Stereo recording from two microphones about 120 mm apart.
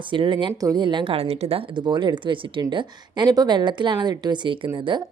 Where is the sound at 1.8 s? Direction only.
40° right (ahead or behind).